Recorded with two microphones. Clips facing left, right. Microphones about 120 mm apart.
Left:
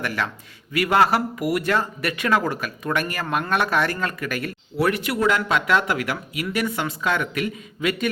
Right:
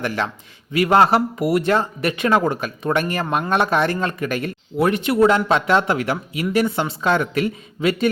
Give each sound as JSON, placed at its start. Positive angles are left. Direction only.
{"t": 0.0, "sound": "speech", "side_deg": -25}